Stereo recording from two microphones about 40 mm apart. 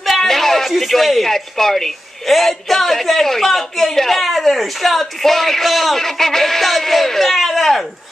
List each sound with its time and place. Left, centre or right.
0.2 s speech: centre